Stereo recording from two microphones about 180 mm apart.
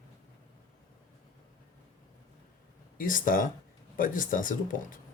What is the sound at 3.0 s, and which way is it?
Speech, 50° left (ahead or behind).